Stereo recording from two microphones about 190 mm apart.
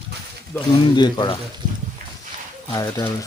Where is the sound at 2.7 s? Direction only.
20° left (ahead or behind).